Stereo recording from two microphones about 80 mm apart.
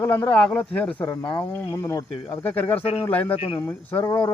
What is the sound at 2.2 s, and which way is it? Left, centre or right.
Speech, left.